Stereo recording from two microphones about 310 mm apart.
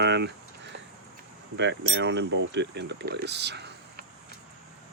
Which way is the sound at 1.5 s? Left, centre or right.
Right.